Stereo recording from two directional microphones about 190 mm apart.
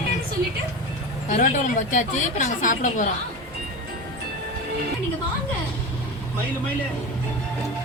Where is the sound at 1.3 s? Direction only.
45° left (ahead or behind).